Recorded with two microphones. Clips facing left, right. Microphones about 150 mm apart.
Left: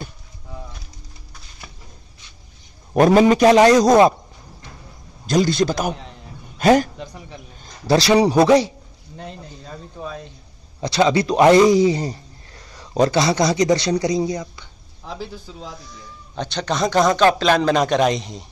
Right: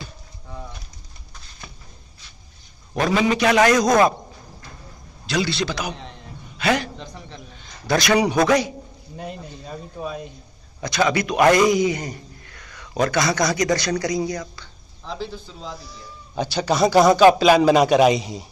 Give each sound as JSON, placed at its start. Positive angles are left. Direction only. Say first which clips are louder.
{"t": 2.9, "sound": "a man's voice", "louder": "left 7 dB", "side_deg": 45}
{"t": 3.5, "sound": "speech", "louder": "left 4 dB", "side_deg": 30}
{"t": 5.2, "sound": "a man's voice", "louder": "left 6 dB", "side_deg": 45}
{"t": 7.0, "sound": "a sound", "louder": "left 2 dB", "side_deg": 10}
{"t": 7.6, "sound": "a man's voice", "louder": "left 4 dB", "side_deg": 35}
{"t": 9.1, "sound": "a sound", "louder": "right 2 dB", "side_deg": -15}
{"t": 10.8, "sound": "a man's voice", "louder": "left 4 dB", "side_deg": 25}
{"t": 15.8, "sound": "speech", "louder": "even", "side_deg": -5}